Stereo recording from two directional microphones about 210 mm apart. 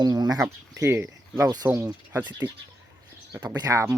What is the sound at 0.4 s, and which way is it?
Speech, 10° right (ahead or behind).